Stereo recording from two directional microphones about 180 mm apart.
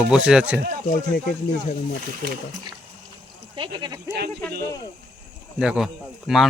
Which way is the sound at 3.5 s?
25° right (ahead or behind).